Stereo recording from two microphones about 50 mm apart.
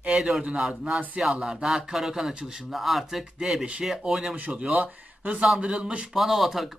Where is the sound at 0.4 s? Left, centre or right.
Centre.